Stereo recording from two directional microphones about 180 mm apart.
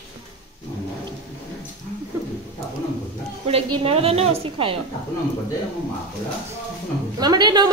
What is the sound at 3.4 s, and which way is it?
A woman's voice, 35° right (ahead or behind).